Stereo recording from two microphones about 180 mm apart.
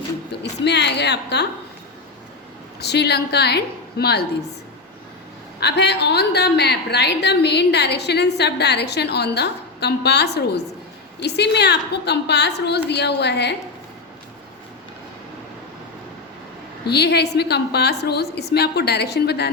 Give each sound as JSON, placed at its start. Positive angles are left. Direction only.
{"t": 0.4, "sound": "a woman's voice", "side_deg": 70}
{"t": 2.8, "sound": "a woman's voice", "side_deg": 65}
{"t": 5.5, "sound": "a woman's voice", "side_deg": 65}
{"t": 16.8, "sound": "a woman's voice", "side_deg": 65}